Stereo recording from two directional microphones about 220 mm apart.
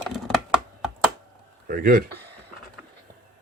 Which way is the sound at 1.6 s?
40° right (ahead or behind).